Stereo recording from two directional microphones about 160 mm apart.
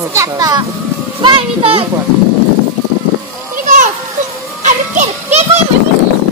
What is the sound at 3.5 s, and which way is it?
Children playing, 55° right (ahead or behind).